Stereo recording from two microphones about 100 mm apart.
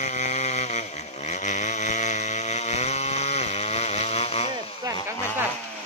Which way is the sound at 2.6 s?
90° left.